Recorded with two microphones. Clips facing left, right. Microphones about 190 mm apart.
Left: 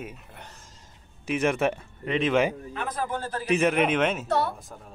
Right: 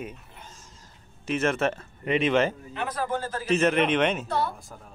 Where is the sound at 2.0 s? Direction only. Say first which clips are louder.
Right 1 dB; 5° right (ahead or behind).